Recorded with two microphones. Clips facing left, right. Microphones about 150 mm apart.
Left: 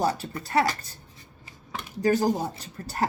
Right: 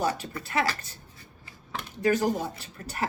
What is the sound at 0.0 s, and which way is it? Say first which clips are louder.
Speech: left 2 dB; 35° left (ahead or behind).